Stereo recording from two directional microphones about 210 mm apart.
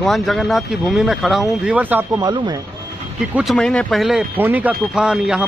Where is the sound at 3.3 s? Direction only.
Centre (ahead or behind).